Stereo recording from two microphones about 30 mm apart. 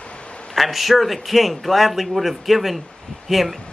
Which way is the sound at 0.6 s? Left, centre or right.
Centre.